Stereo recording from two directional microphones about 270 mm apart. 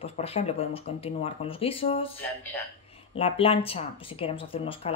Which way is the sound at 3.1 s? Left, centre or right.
Left.